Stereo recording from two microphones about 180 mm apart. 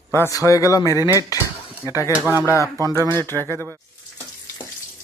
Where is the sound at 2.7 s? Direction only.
20° right (ahead or behind).